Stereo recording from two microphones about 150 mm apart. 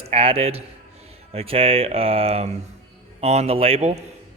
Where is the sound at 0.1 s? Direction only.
40° right (ahead or behind).